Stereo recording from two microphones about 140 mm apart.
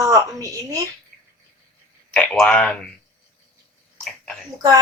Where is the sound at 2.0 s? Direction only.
5° left (ahead or behind).